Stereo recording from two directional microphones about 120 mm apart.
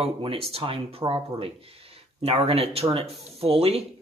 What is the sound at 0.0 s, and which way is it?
Speech, 50° right (ahead or behind).